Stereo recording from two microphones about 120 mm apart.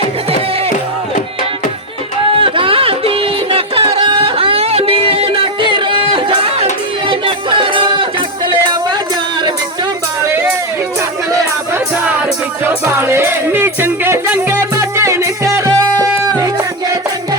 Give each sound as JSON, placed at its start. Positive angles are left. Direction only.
{"t": 2.4, "sound": "music", "side_deg": -50}
{"t": 10.2, "sound": "a sound", "side_deg": -20}
{"t": 12.6, "sound": "music", "side_deg": -20}